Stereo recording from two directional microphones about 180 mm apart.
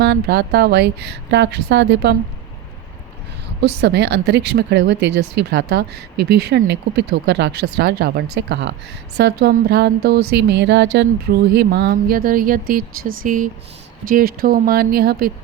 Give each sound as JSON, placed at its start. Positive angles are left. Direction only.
{"t": 0.0, "sound": "speech", "side_deg": -65}
{"t": 3.6, "sound": "speech", "side_deg": -70}
{"t": 9.1, "sound": "speech", "side_deg": -70}